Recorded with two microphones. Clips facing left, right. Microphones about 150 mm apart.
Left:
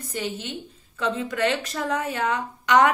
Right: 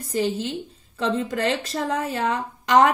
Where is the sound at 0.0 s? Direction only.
30° right (ahead or behind).